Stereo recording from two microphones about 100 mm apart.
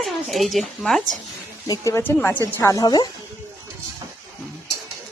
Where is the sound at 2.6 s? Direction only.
30° left (ahead or behind).